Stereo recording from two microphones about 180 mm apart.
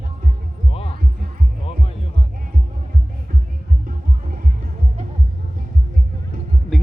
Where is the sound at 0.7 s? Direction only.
35° left (ahead or behind).